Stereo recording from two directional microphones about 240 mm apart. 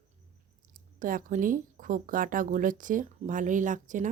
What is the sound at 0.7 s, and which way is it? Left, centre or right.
Speech, right.